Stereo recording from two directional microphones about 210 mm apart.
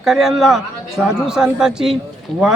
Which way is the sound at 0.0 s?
Centre (ahead or behind).